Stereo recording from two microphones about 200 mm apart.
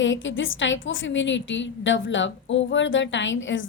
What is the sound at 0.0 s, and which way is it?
A woman's voice, 70° left (ahead or behind).